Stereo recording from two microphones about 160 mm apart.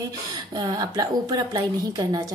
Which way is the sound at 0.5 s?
25° right (ahead or behind).